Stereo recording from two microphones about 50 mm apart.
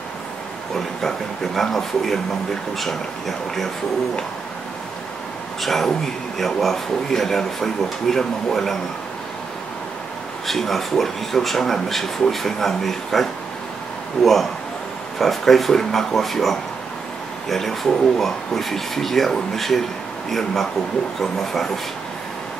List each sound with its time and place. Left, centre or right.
0.7 s speech: centre
5.6 s speech: centre
10.4 s speech: centre